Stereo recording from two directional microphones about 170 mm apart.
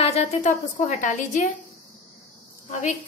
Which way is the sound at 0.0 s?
40° left (ahead or behind).